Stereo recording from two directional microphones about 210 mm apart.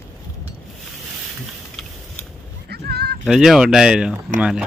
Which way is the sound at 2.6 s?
50° right (ahead or behind).